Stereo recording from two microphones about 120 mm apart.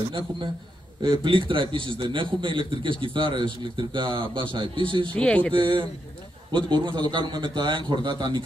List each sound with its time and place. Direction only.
1.0 s a man's voice: 45° right (ahead or behind)
5.1 s speech: 10° left (ahead or behind)
5.5 s a man's voice: 45° right (ahead or behind)